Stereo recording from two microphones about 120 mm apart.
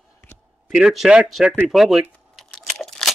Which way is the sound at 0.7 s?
5° right (ahead or behind).